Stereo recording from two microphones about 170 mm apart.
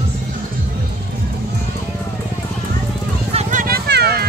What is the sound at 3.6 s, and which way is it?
Music, 70° right (ahead or behind).